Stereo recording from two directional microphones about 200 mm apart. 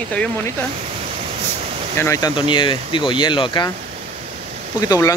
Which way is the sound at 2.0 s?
15° left (ahead or behind).